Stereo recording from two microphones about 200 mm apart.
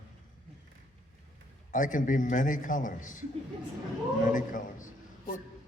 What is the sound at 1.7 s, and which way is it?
A man's voice, 40° left (ahead or behind).